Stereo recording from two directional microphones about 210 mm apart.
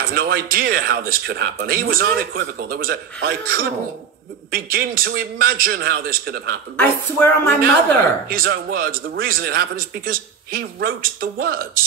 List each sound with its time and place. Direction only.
0.0 s speech: 45° right (ahead or behind)
6.8 s speech: 10° left (ahead or behind)
8.3 s speech: 45° right (ahead or behind)